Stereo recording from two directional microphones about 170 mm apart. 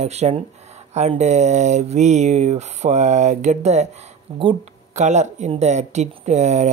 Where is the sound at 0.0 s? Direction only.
40° right (ahead or behind).